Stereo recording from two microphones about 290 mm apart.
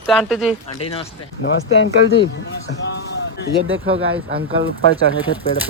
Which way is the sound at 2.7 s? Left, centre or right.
Left.